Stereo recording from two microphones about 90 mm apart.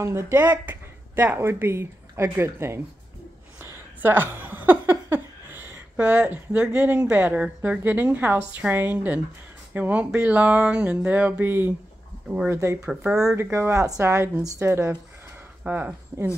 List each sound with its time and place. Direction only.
0.0 s speech: 30° right (ahead or behind)
10.1 s music: 15° right (ahead or behind)
11.1 s speech: 15° right (ahead or behind)
12.8 s music: 5° right (ahead or behind)
13.4 s speech: 30° right (ahead or behind)
14.4 s a woman's voice: 35° right (ahead or behind)
15.6 s speech: 20° right (ahead or behind)